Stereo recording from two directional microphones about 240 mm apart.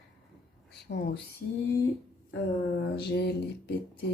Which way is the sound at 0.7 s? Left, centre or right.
Left.